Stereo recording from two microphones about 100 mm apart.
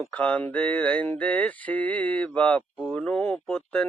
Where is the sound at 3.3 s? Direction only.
5° left (ahead or behind).